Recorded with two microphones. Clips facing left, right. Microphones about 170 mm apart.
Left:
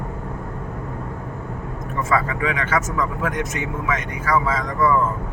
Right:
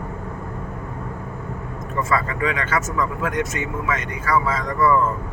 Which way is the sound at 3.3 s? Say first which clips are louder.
Right 1 dB; 15° left (ahead or behind).